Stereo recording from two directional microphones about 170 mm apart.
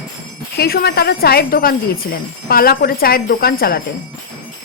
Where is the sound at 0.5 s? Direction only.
65° left (ahead or behind).